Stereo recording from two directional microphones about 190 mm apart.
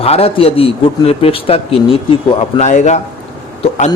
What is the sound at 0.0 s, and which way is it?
Speech, 30° left (ahead or behind).